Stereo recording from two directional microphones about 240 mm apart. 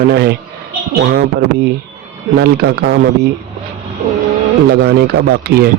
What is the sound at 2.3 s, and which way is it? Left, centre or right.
Speech, right.